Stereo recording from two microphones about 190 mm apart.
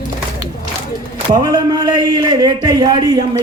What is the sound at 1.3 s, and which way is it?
A man's voice, 20° right (ahead or behind).